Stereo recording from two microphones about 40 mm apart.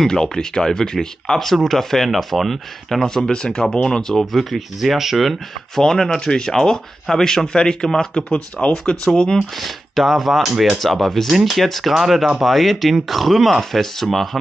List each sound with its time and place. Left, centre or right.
0.0 s speech: centre
3.3 s speech: centre
4.2 s speech: centre
5.8 s speech: centre
9.6 s speech: centre